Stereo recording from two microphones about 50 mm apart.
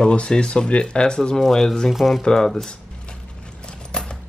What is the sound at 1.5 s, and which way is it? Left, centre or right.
Speech, centre.